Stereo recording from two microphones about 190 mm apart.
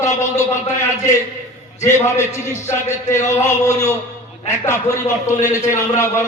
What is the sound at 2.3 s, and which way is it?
Speech, 40° left (ahead or behind).